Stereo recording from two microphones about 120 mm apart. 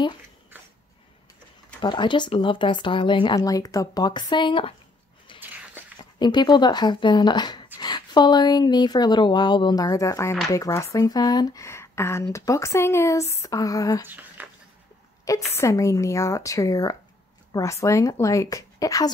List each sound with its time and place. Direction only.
1.8 s speech: 40° left (ahead or behind)
3.3 s speech: 30° left (ahead or behind)
5.3 s a sound: 45° left (ahead or behind)
6.1 s speech: 40° left (ahead or behind)
14.0 s a sound: 15° right (ahead or behind)
15.2 s speech: 25° left (ahead or behind)